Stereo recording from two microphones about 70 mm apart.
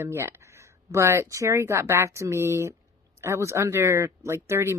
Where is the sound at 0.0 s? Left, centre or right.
Right.